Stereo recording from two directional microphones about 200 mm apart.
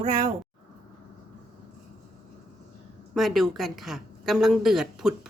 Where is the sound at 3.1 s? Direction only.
Centre (ahead or behind).